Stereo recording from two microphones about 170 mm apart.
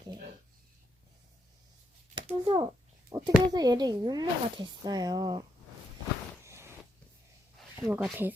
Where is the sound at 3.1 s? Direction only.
25° right (ahead or behind).